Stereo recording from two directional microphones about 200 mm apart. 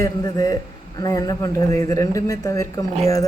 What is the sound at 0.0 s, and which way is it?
A man's voice, 20° left (ahead or behind).